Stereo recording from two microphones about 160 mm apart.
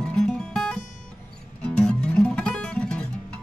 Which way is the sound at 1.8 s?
5° left (ahead or behind).